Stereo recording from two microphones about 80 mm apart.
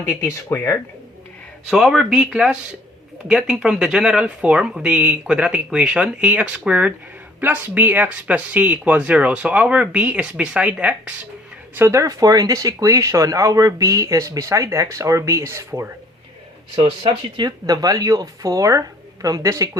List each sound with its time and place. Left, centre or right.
0.0 s speech: left
1.6 s speech: centre
11.9 s speech: right
16.7 s speech: right